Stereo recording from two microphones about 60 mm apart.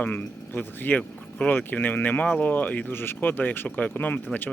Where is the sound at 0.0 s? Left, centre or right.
Left.